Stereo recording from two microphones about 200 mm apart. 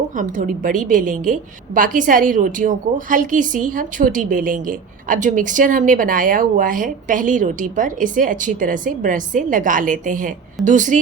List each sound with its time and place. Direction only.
0.1 s a woman's voice: 40° right (ahead or behind)